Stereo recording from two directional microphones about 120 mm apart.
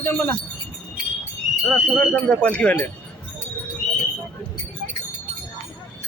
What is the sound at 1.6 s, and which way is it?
Speech, 10° left (ahead or behind).